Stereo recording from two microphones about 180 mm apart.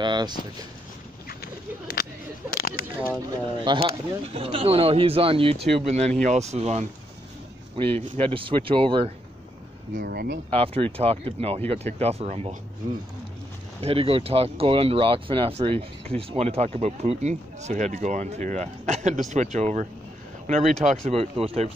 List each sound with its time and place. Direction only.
0.0 s speech: 25° right (ahead or behind)
1.4 s whip: 60° left (ahead or behind)
2.5 s a sound: 55° left (ahead or behind)
3.3 s speech: 25° right (ahead or behind)
9.9 s speech: 60° right (ahead or behind)
10.5 s speech: 30° right (ahead or behind)
13.7 s speech: 35° right (ahead or behind)